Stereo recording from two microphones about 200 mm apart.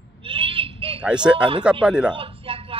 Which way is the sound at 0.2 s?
25° right (ahead or behind).